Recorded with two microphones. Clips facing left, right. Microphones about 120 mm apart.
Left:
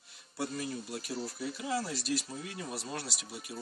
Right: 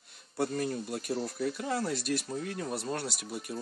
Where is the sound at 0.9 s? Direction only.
55° right (ahead or behind).